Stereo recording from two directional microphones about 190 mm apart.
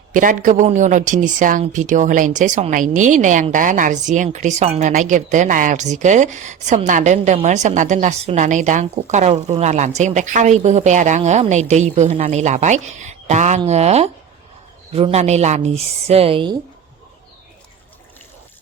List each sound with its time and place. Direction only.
0.1 s a woman's voice: 45° right (ahead or behind); by 16.6 s 25° right (ahead or behind)